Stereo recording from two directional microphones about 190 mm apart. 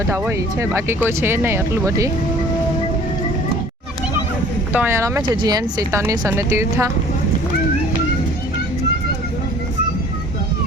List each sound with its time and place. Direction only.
0.1 s speech: 15° right (ahead or behind)
4.7 s speech: 10° right (ahead or behind)